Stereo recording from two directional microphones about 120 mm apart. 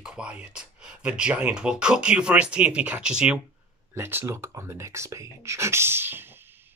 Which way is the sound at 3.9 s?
20° right (ahead or behind).